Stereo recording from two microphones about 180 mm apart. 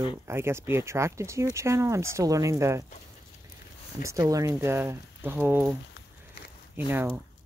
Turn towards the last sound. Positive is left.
turn(degrees=-10)  # may be behind; listen again after turning